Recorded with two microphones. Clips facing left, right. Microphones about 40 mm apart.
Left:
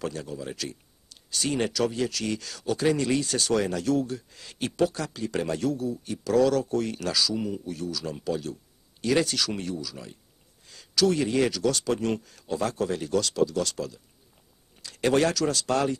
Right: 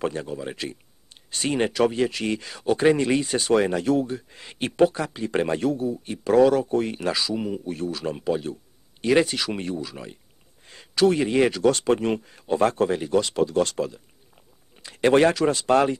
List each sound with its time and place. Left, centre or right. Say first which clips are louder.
0.0 s speech: right 5 dB; right